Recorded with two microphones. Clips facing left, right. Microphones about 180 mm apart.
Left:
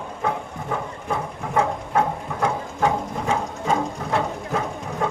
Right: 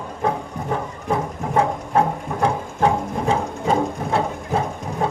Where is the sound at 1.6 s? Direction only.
30° right (ahead or behind).